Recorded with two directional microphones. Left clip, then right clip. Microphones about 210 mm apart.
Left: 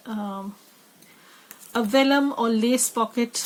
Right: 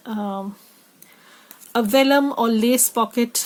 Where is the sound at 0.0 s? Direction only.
50° right (ahead or behind).